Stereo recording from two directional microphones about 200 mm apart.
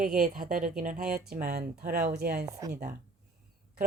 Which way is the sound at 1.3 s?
50° right (ahead or behind).